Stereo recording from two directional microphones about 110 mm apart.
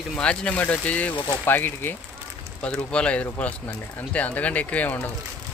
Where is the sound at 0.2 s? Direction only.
10° left (ahead or behind).